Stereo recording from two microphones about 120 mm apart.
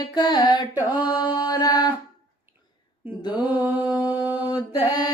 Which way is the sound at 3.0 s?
15° right (ahead or behind).